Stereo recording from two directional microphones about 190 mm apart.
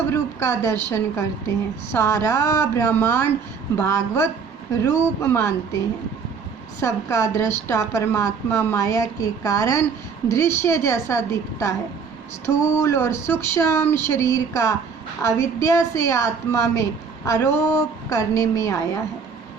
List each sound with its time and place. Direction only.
0.1 s a woman's voice: 15° left (ahead or behind)